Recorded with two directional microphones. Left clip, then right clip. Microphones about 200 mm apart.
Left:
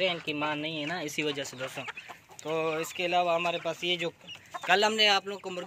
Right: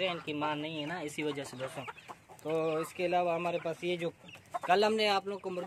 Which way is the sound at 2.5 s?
5° left (ahead or behind).